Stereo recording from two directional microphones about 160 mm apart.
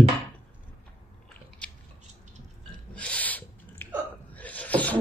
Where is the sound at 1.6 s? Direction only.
5° left (ahead or behind).